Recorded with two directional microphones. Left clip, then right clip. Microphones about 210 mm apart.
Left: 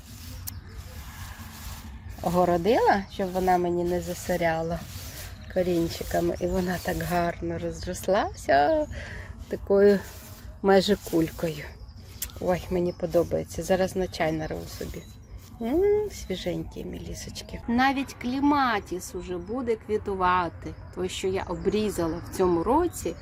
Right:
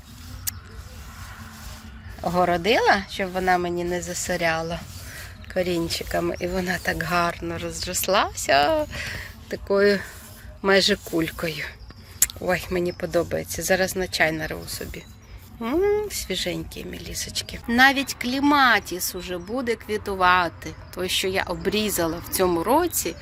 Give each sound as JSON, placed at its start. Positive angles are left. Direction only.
{"t": 2.4, "sound": "speech", "side_deg": 10}
{"t": 3.8, "sound": "speech", "side_deg": 5}
{"t": 4.1, "sound": "speech", "side_deg": 20}
{"t": 12.5, "sound": "speech", "side_deg": 5}